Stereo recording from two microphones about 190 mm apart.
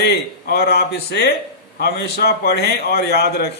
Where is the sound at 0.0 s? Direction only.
55° left (ahead or behind).